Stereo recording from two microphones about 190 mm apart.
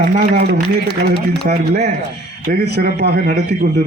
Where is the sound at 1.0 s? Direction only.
55° right (ahead or behind).